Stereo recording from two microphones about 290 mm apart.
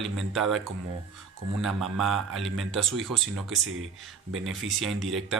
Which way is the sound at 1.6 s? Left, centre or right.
Centre.